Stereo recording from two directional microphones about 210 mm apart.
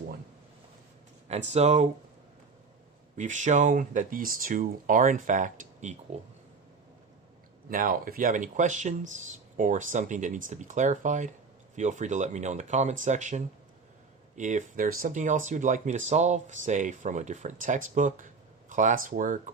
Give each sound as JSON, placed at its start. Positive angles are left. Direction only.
{"t": 1.5, "sound": "speech", "side_deg": -35}
{"t": 3.2, "sound": "speech", "side_deg": -35}
{"t": 7.7, "sound": "speech", "side_deg": -40}